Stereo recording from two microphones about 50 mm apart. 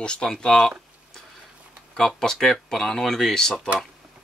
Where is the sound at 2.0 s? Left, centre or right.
Centre.